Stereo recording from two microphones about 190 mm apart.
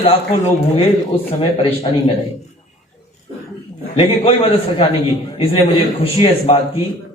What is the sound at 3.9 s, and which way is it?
A man's voice, 30° left (ahead or behind).